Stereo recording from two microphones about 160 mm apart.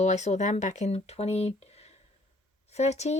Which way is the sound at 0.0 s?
45° left (ahead or behind).